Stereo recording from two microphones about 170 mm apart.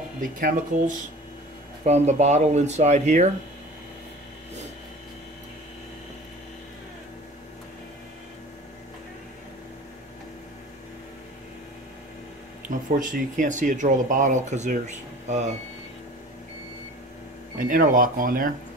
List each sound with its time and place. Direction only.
0.2 s speech: 55° right (ahead or behind)
1.9 s speech: 40° right (ahead or behind)
12.6 s speech: 50° right (ahead or behind)
17.6 s speech: 55° right (ahead or behind)